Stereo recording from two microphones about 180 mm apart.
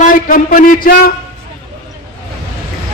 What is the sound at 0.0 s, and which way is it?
A man's voice, 50° left (ahead or behind).